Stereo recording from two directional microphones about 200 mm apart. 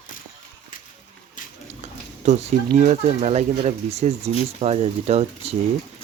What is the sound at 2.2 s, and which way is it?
Speech, 35° right (ahead or behind).